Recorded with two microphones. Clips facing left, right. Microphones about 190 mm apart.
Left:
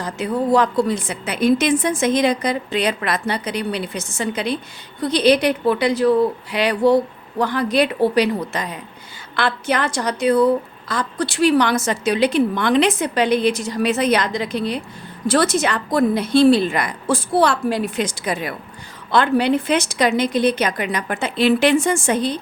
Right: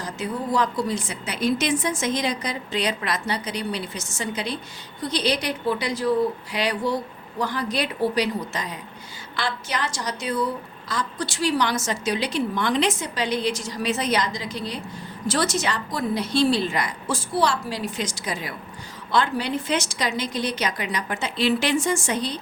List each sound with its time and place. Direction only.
0.0 s a woman's voice: 60° left (ahead or behind)